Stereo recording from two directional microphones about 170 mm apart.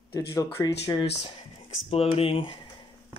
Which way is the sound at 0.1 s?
20° left (ahead or behind).